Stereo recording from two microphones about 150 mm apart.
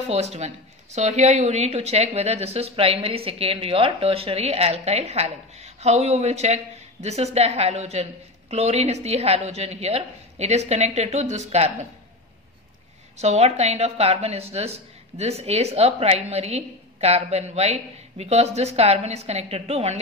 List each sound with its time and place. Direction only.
0.1 s a woman's voice: 45° right (ahead or behind)
13.2 s a woman's voice: 45° right (ahead or behind)